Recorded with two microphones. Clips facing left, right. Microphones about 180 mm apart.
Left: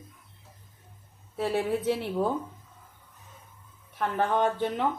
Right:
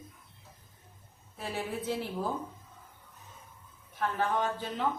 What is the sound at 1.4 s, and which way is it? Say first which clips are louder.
Speech: left 9 dB; 65° left (ahead or behind).